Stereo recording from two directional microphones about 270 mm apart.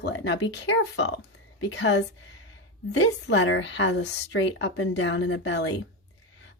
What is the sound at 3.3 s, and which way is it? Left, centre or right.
Speech, left.